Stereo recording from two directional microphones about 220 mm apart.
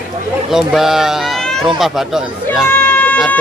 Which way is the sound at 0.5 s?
Centre (ahead or behind).